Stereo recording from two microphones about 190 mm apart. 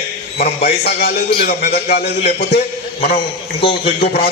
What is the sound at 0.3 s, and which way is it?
A man's voice, 55° left (ahead or behind).